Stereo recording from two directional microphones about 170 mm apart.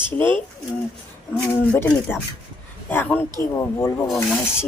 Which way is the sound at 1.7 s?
15° left (ahead or behind).